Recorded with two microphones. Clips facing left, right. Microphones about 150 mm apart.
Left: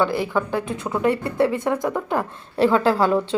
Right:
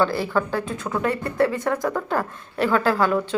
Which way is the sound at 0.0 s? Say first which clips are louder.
Even; 15° left (ahead or behind).